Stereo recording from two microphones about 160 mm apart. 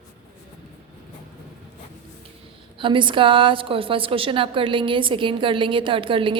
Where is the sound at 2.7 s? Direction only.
30° right (ahead or behind).